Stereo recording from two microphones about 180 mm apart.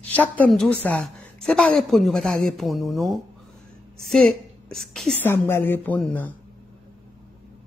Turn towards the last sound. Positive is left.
turn(degrees=10)  # may be behind; listen again after turning